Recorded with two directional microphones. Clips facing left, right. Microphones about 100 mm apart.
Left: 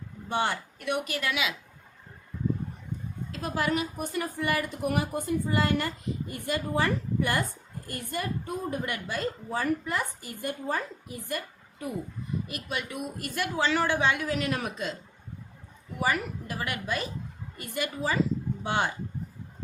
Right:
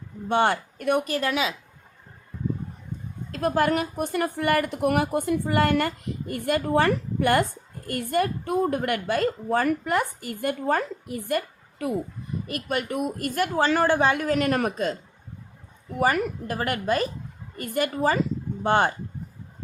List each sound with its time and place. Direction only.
0.3 s a woman's voice: 60° right (ahead or behind); by 1.5 s 35° right (ahead or behind)
3.3 s a woman's voice: 50° right (ahead or behind)
16.0 s a woman's voice: 50° right (ahead or behind)